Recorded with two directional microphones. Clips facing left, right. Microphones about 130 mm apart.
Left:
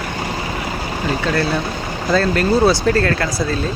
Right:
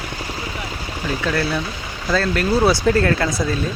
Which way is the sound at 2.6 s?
15° right (ahead or behind).